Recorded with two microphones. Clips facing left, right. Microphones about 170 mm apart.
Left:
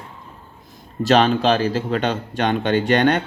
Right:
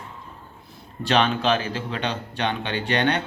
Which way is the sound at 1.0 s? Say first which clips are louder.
Left 6 dB; 40° left (ahead or behind).